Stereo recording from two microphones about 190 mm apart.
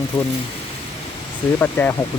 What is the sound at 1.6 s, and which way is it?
Speech, 10° left (ahead or behind).